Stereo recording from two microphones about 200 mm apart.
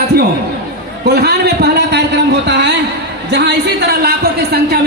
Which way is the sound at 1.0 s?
55° right (ahead or behind).